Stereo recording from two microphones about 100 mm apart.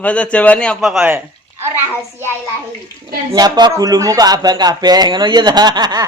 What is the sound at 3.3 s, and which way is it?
Speech, 40° right (ahead or behind).